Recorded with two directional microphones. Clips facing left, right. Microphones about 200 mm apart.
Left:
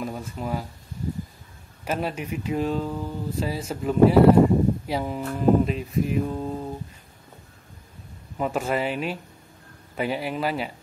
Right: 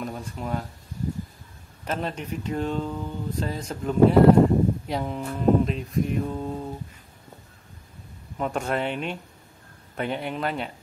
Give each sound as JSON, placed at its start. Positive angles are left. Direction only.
{"t": 0.0, "sound": "speech", "side_deg": 5}
{"t": 1.9, "sound": "speech", "side_deg": 10}
{"t": 5.3, "sound": "music", "side_deg": 5}
{"t": 8.4, "sound": "music", "side_deg": 5}